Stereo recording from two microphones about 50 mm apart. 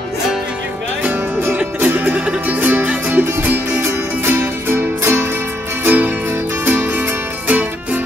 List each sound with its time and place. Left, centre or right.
1.0 s music: right
5.9 s music: right